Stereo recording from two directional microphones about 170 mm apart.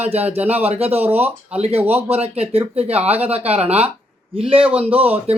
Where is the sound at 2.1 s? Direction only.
35° right (ahead or behind).